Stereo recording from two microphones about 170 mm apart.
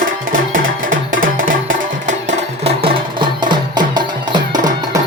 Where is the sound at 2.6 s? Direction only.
35° right (ahead or behind).